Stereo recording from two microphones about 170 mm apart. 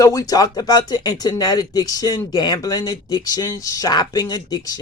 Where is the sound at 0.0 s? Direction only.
20° left (ahead or behind).